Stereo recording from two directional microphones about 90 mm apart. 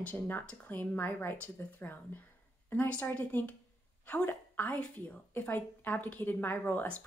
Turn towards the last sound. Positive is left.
turn(degrees=20)  # may be behind; listen again after turning